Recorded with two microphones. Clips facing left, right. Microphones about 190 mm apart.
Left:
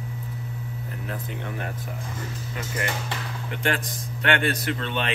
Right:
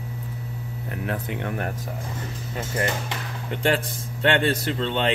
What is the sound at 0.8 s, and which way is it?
Speech, 65° right (ahead or behind).